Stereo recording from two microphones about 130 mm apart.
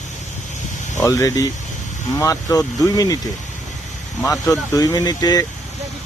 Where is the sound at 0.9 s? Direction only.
20° left (ahead or behind).